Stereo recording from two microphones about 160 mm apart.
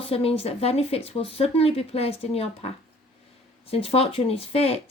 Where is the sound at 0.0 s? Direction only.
35° left (ahead or behind).